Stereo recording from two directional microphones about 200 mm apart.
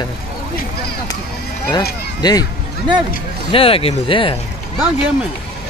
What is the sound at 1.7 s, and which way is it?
Speech, 20° left (ahead or behind).